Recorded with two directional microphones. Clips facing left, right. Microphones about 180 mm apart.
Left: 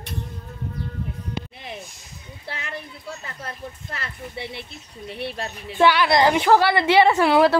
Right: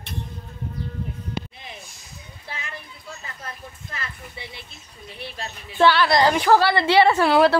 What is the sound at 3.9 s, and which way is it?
Speech, 65° left (ahead or behind).